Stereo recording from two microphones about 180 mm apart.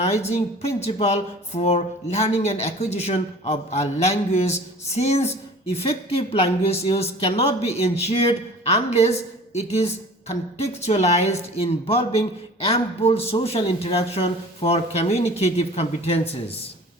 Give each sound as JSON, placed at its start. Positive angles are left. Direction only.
{"t": 0.0, "sound": "speech", "side_deg": 35}